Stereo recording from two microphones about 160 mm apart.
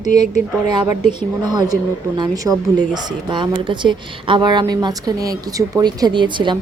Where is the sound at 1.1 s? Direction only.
25° right (ahead or behind).